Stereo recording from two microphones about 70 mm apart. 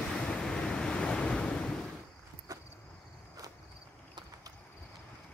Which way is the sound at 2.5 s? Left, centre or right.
Right.